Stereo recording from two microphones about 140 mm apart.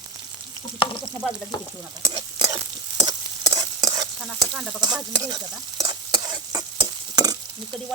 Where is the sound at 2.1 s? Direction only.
30° right (ahead or behind).